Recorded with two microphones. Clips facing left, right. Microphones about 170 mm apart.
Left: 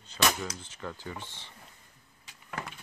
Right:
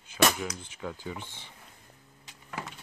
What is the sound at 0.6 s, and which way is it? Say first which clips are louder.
Speech: right 2 dB; 10° right (ahead or behind).